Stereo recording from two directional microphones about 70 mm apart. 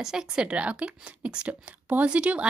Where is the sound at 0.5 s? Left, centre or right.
Centre.